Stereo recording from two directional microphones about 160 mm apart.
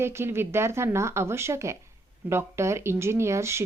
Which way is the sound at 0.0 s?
15° right (ahead or behind).